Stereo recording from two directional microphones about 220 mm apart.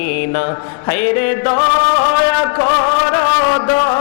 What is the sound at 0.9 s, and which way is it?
Music, 15° left (ahead or behind).